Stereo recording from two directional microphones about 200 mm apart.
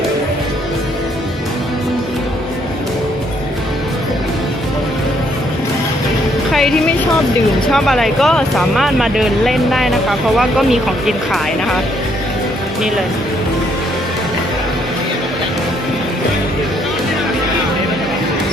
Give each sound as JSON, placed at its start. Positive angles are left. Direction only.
{"t": 6.5, "sound": "music", "side_deg": 0}
{"t": 7.7, "sound": "speech", "side_deg": 0}